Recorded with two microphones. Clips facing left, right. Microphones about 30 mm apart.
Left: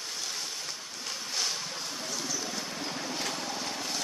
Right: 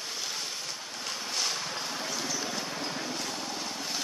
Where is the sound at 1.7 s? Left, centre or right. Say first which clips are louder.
Right 3 dB; right.